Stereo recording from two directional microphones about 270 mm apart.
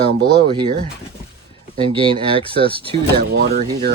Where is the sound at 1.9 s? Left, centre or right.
Centre.